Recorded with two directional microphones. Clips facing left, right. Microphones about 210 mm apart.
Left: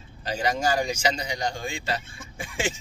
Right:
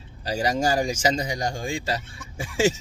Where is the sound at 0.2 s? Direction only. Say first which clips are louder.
Right 2 dB; 40° right (ahead or behind).